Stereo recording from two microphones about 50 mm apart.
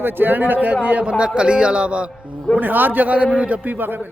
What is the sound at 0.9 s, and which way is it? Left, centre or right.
Speech, right.